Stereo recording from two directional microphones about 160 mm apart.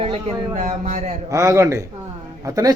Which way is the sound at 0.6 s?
55° right (ahead or behind).